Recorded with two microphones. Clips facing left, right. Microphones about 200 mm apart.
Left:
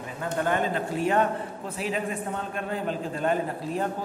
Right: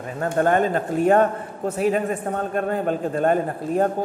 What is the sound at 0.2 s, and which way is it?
A man's voice, 50° right (ahead or behind).